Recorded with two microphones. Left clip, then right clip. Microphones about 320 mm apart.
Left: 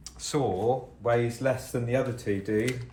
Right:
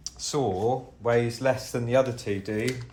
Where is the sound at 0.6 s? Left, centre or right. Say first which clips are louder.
Even; right.